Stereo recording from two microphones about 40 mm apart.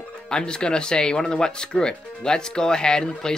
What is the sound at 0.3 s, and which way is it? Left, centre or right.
Speech, left.